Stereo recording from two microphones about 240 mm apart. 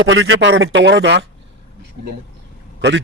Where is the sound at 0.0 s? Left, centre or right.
Right.